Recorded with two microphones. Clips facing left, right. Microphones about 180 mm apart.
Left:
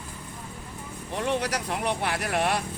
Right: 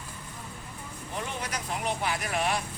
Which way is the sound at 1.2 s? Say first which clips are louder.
Left 11 dB; 75° left (ahead or behind).